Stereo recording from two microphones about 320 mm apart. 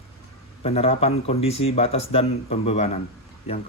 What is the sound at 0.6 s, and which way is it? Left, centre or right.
Speech, centre.